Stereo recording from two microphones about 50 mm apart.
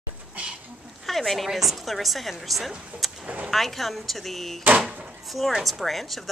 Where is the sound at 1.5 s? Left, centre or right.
Centre.